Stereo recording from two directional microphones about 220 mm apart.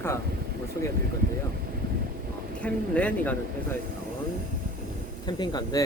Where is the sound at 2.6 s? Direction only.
5° left (ahead or behind).